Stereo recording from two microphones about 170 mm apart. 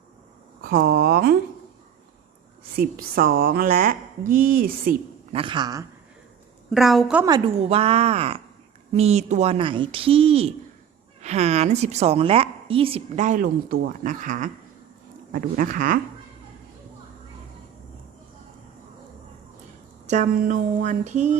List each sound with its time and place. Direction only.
0.6 s a woman's voice: 60° right (ahead or behind)
2.7 s a woman's voice: 60° right (ahead or behind)
5.3 s speech: 30° right (ahead or behind)
6.7 s a woman's voice: centre (ahead or behind)
7.3 s speech: 25° right (ahead or behind)
7.6 s a woman's voice: 35° right (ahead or behind); by 16.0 s 55° right (ahead or behind)
20.1 s a sound: 50° right (ahead or behind)